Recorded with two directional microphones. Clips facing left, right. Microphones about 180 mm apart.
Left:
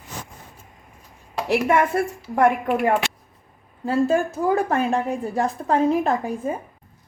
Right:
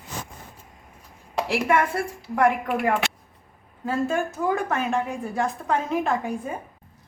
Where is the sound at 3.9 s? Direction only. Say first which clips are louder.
Left 5 dB; 35° left (ahead or behind).